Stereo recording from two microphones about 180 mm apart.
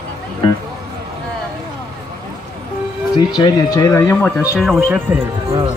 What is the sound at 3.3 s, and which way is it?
Speech, 20° left (ahead or behind).